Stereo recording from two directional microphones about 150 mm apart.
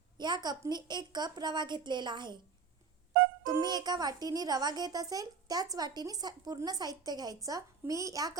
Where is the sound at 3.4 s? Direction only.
25° right (ahead or behind).